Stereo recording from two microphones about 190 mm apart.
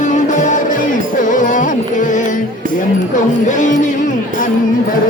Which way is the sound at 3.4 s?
40° left (ahead or behind).